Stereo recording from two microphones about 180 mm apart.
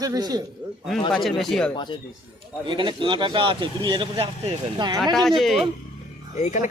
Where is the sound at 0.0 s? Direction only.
20° right (ahead or behind).